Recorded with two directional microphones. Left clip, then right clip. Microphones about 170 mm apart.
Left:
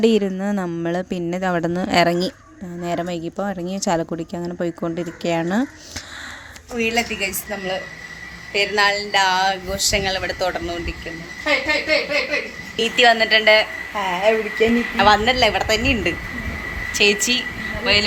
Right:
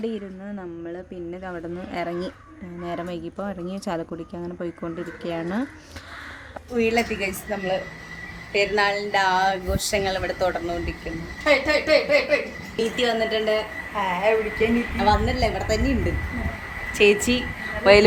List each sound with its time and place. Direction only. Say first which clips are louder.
0.0 s a woman's voice: left 13 dB; 65° left (ahead or behind)
2.8 s speech: left 6 dB; 40° left (ahead or behind)
6.7 s speech: left 1 dB; 5° right (ahead or behind)
11.4 s speech: even; 30° right (ahead or behind)
12.7 s speech: left 8 dB; centre (ahead or behind)
13.9 s a woman's voice: left 3 dB; 50° left (ahead or behind)
14.9 s speech: left 9 dB; centre (ahead or behind)
17.0 s speech: left 1 dB; 15° right (ahead or behind)
17.9 s speech: right 3 dB; 40° right (ahead or behind)